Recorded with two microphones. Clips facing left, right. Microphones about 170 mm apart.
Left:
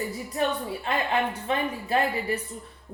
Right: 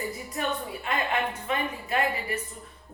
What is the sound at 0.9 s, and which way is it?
Speech, 30° left (ahead or behind).